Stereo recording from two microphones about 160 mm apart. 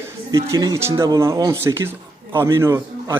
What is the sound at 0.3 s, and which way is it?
A man's voice, 20° right (ahead or behind).